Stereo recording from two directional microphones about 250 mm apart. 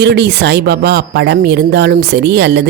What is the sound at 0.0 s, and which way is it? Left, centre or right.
Speech, right.